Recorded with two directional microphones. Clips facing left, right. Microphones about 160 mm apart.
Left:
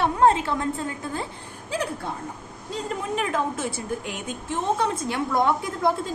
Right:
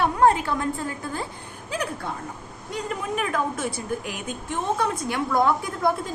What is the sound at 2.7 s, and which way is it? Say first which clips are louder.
A woman's voice: even; 30° left (ahead or behind).